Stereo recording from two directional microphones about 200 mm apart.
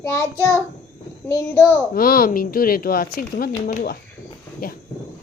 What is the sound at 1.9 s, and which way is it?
Speech, 45° left (ahead or behind).